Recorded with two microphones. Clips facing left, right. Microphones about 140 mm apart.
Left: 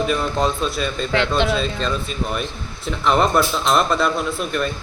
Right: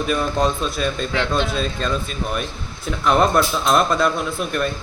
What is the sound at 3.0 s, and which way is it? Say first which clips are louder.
A man's voice: even; centre (ahead or behind).